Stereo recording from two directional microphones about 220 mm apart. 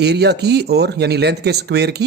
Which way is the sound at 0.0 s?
50° right (ahead or behind).